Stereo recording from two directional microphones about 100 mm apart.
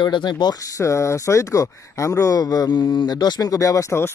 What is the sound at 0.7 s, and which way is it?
Speech, 30° left (ahead or behind).